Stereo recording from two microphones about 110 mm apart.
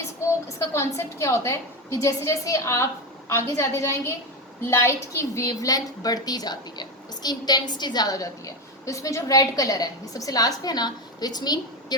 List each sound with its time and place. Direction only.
0.4 s a woman's voice: 25° left (ahead or behind)